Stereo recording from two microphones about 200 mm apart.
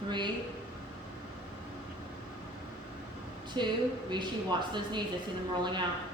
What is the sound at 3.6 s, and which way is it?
Speech, 25° right (ahead or behind).